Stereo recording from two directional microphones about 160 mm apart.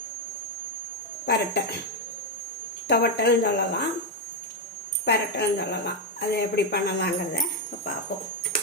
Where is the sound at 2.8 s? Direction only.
90° left.